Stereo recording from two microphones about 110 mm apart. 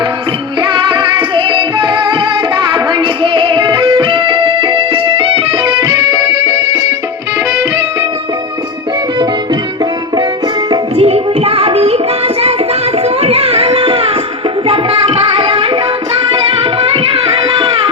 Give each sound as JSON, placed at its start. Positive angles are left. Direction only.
{"t": 0.6, "sound": "music", "side_deg": -50}
{"t": 5.8, "sound": "music", "side_deg": -35}
{"t": 10.9, "sound": "music", "side_deg": -65}
{"t": 13.2, "sound": "music", "side_deg": -65}
{"t": 16.8, "sound": "tabla", "side_deg": -60}